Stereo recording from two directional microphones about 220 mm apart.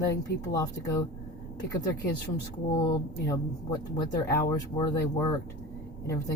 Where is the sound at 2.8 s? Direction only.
15° left (ahead or behind).